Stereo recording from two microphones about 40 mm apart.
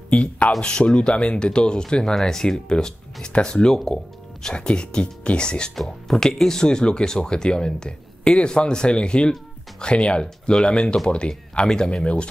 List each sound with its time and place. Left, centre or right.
0.1 s speech: left
5.8 s speech: centre